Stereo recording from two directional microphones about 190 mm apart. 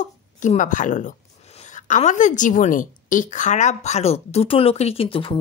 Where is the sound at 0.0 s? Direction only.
40° left (ahead or behind).